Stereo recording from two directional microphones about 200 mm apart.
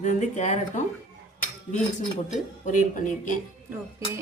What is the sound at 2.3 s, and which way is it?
A woman's voice, 40° left (ahead or behind).